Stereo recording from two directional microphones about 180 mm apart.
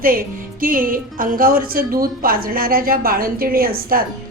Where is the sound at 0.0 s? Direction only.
50° right (ahead or behind).